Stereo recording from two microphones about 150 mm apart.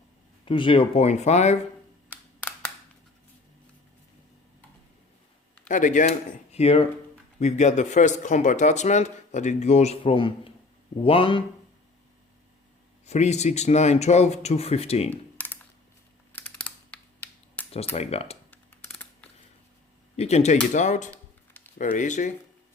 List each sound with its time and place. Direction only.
0.4 s speech: 35° left (ahead or behind)
5.6 s speech: 55° left (ahead or behind); by 11.4 s 35° left (ahead or behind)
13.1 s speech: 50° left (ahead or behind)
15.1 s typing: 10° left (ahead or behind)
16.3 s computer keyboard: 10° left (ahead or behind)
17.9 s speech: 45° left (ahead or behind)
18.5 s typing: 10° left (ahead or behind)
20.1 s speech: 45° left (ahead or behind)
21.1 s a sound: 10° left (ahead or behind)
21.8 s speech: 55° left (ahead or behind)